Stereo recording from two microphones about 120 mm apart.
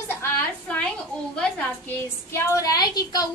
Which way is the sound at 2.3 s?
25° left (ahead or behind).